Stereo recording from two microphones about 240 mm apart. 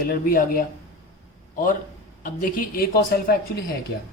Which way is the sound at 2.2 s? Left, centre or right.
Left.